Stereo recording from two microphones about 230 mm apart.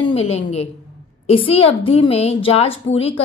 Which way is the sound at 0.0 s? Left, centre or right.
Left.